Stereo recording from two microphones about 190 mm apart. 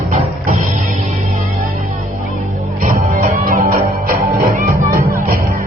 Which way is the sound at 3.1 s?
45° right (ahead or behind).